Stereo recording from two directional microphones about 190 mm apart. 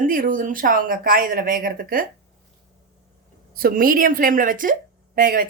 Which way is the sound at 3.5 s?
50° right (ahead or behind).